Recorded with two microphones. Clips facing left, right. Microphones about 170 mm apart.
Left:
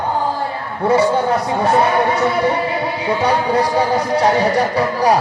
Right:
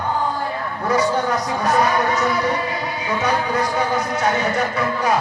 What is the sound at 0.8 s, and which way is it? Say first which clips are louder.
Speech: left 5 dB; 30° left (ahead or behind).